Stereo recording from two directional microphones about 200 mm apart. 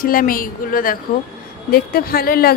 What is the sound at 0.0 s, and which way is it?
A woman's voice, 45° left (ahead or behind).